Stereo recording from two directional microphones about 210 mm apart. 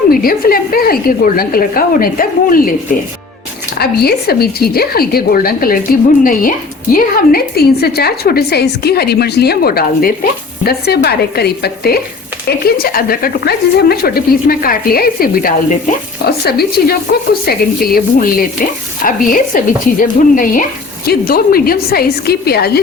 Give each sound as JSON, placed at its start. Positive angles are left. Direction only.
{"t": 0.1, "sound": "speech", "side_deg": 45}
{"t": 3.8, "sound": "speech", "side_deg": 50}